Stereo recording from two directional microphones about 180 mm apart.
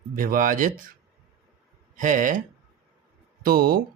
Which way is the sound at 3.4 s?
55° right (ahead or behind).